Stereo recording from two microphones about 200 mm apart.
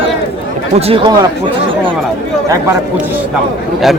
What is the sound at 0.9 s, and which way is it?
Speech, 20° right (ahead or behind).